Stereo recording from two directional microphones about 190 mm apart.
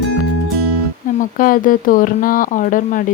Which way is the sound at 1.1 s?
45° left (ahead or behind).